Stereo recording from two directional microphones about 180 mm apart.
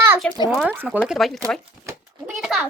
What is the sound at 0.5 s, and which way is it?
Speech, 5° right (ahead or behind).